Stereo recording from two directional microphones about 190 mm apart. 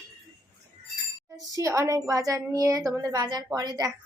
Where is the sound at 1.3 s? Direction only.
15° right (ahead or behind).